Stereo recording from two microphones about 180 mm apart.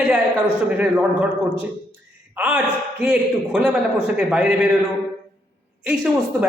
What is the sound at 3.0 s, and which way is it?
A man's voice, 5° right (ahead or behind).